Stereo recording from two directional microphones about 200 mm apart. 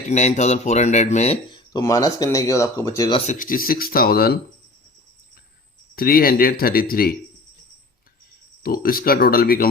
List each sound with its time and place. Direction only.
0.1 s speech: 35° left (ahead or behind); by 3.2 s 20° left (ahead or behind)
3.2 s speech: 40° left (ahead or behind)
6.0 s speech: 50° left (ahead or behind)
8.6 s speech: 45° left (ahead or behind)